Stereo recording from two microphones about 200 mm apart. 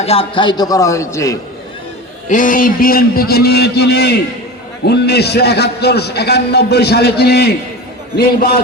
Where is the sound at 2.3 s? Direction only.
40° left (ahead or behind).